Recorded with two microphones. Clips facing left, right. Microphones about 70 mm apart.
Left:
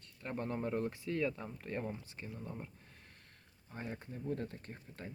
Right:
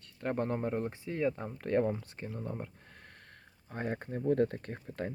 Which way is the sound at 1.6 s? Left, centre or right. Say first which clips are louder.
Right 12 dB; right.